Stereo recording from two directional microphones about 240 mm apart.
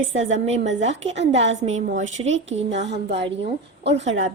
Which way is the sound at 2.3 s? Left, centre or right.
Right.